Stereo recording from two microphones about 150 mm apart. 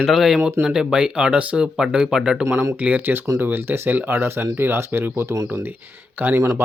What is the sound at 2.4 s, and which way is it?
Speech, 20° right (ahead or behind).